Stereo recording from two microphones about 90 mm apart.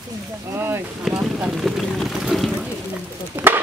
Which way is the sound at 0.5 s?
25° right (ahead or behind).